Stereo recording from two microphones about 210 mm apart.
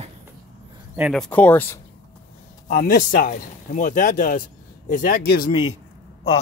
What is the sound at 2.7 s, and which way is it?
Speech, 45° left (ahead or behind).